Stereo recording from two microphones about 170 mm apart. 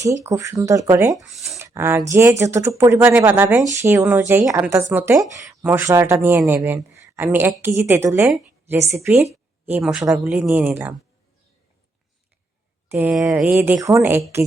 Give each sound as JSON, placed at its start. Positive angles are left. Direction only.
{"t": 0.0, "sound": "a woman's voice", "side_deg": -15}
{"t": 1.2, "sound": "speech", "side_deg": 0}
{"t": 1.5, "sound": "a sound", "side_deg": -15}
{"t": 2.0, "sound": "a woman's voice", "side_deg": -15}
{"t": 12.9, "sound": "a woman's voice", "side_deg": -10}